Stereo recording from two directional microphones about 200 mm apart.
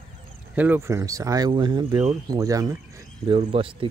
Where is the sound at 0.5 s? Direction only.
10° right (ahead or behind).